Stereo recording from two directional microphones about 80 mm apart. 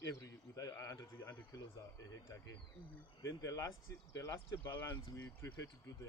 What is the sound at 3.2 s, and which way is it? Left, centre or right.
Speech, left.